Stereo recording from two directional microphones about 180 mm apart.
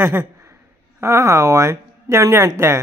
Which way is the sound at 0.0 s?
15° right (ahead or behind).